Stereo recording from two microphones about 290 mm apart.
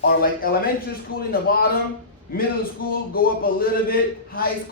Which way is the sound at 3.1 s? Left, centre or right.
Left.